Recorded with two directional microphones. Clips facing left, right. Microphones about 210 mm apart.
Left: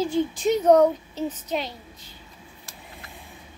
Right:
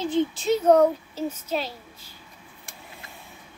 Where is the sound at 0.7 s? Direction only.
5° right (ahead or behind).